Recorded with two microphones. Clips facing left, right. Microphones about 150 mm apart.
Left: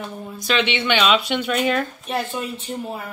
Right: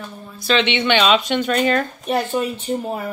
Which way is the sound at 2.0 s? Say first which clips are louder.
Right 5 dB; 40° right (ahead or behind).